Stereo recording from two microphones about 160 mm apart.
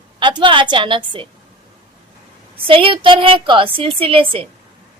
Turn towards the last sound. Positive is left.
turn(degrees=-35)  # may be behind; listen again after turning